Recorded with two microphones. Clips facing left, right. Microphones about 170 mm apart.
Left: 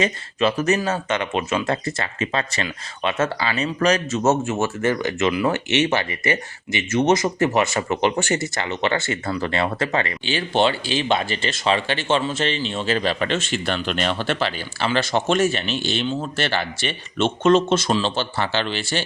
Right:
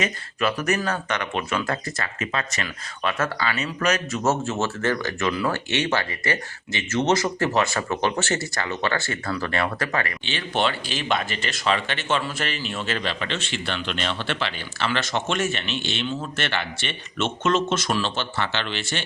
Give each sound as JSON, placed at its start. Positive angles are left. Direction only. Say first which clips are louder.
{"t": 0.0, "sound": "speech", "louder": "left 4 dB", "side_deg": 25}
{"t": 4.2, "sound": "speech", "louder": "left 4 dB", "side_deg": 20}